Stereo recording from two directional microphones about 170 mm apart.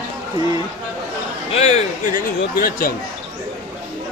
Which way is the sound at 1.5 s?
40° left (ahead or behind).